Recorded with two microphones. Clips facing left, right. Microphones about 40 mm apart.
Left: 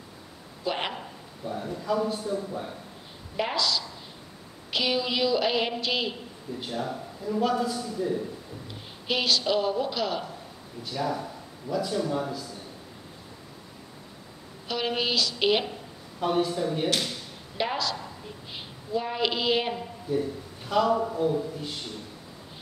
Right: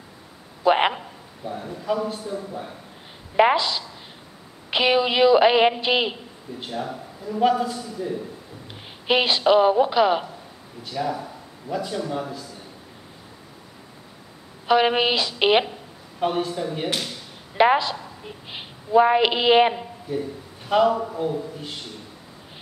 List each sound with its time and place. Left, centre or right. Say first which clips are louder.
0.7 s a sound: right 11 dB; right
2.0 s a man's voice: even; centre
3.3 s a woman's voice: right 9 dB; right
6.7 s a man's voice: right 2 dB; centre
7.3 s a woman's voice: right 6 dB; right
9.0 s a woman's voice: right 7 dB; right
10.8 s a man's voice: right 3 dB; centre
14.7 s a woman's voice: right 9 dB; right
16.4 s a man's voice: even; centre
17.6 s a woman's voice: right 11 dB; right
20.9 s a man's voice: even; centre